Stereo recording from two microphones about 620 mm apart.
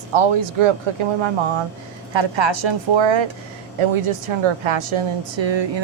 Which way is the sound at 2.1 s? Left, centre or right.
Right.